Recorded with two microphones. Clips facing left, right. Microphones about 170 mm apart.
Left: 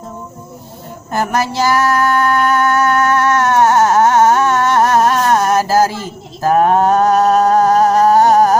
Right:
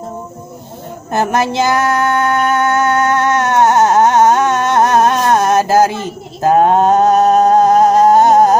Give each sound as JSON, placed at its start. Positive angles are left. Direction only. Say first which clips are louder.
{"t": 1.1, "sound": "female singing", "louder": "right 2 dB", "side_deg": -20}